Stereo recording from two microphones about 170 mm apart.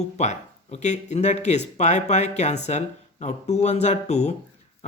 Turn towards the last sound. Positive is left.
turn(degrees=40)  # may be behind; listen again after turning